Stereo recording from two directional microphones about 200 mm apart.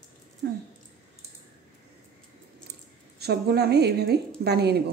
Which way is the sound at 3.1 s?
55° right (ahead or behind).